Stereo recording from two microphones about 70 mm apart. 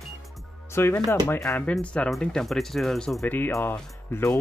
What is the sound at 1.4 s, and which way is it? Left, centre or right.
Speech, centre.